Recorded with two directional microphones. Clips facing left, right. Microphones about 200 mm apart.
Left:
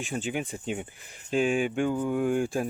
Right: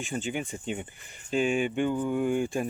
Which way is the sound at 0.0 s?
Centre (ahead or behind).